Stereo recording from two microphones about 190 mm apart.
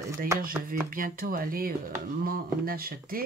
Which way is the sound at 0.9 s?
45° right (ahead or behind).